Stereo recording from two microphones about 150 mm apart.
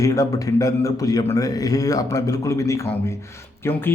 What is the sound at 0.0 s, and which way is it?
A man's voice, 20° left (ahead or behind).